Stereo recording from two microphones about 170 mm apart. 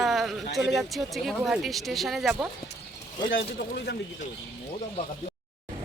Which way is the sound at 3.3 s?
80° left.